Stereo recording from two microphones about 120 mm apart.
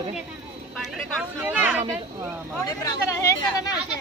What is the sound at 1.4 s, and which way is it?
Speech, 15° right (ahead or behind).